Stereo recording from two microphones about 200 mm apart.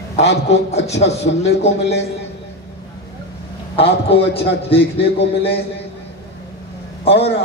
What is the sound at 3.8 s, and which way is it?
A man's voice, 30° left (ahead or behind).